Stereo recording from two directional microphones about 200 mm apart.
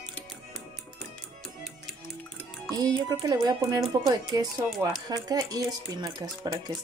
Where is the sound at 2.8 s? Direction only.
20° right (ahead or behind).